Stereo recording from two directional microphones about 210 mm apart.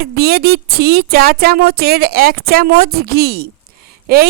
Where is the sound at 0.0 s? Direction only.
50° right (ahead or behind).